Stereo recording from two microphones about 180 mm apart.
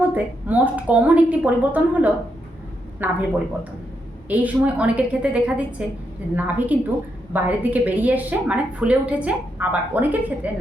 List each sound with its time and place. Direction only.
0.0 s a woman's voice: 10° right (ahead or behind)
6.7 s a woman's voice: 10° right (ahead or behind)